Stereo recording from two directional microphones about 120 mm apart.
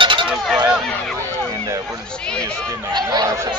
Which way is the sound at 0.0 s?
40° right (ahead or behind).